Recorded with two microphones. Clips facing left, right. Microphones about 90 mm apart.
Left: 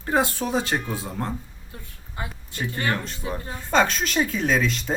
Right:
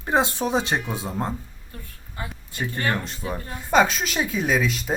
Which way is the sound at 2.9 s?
20° right (ahead or behind).